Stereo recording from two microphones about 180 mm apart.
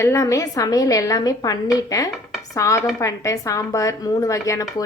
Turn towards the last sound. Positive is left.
turn(degrees=15)  # may be behind; listen again after turning